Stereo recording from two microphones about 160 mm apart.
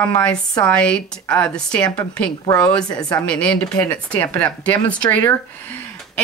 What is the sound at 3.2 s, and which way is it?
Speech, 5° left (ahead or behind).